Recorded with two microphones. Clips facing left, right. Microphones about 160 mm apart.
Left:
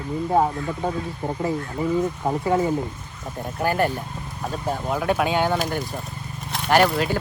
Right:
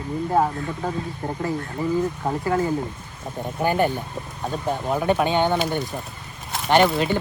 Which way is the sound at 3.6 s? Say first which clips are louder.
Right 1 dB; centre (ahead or behind).